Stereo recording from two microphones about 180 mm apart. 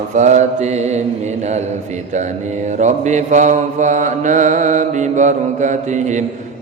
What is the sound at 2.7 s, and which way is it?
Mantra, 40° right (ahead or behind).